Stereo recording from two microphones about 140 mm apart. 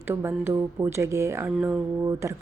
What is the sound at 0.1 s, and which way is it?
Speech, 15° right (ahead or behind).